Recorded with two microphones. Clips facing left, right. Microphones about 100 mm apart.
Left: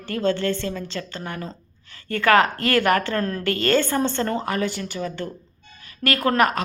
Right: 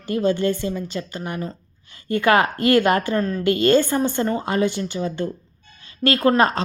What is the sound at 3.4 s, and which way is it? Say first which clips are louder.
A woman's voice: right 5 dB; 15° right (ahead or behind).